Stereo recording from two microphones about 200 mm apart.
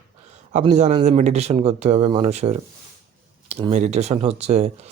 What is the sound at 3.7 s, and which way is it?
Speech, 35° right (ahead or behind).